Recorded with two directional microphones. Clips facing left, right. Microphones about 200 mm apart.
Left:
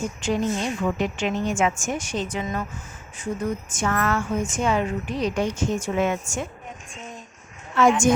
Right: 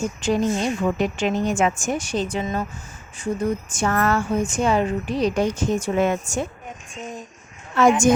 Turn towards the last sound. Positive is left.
turn(degrees=-40)  # may be behind; listen again after turning